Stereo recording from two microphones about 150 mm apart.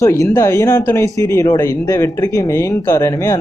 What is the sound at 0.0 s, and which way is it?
Speech, 20° left (ahead or behind).